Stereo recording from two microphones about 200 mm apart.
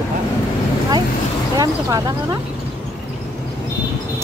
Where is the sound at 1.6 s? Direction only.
20° right (ahead or behind).